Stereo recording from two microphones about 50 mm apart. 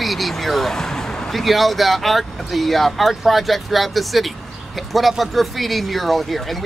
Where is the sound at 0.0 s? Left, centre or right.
Centre.